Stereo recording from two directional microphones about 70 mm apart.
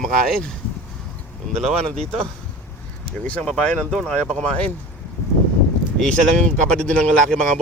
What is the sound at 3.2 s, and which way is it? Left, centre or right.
Speech, centre.